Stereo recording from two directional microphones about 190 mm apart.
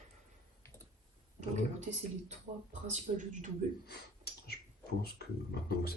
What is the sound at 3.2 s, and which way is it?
Speech, 40° right (ahead or behind).